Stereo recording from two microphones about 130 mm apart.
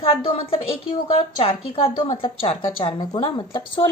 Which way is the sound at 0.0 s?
45° left (ahead or behind).